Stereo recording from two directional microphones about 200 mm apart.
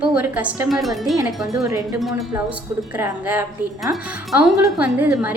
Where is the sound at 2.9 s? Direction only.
10° right (ahead or behind).